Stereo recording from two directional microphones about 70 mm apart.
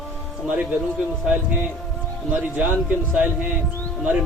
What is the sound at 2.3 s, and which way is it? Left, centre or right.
A man's voice, right.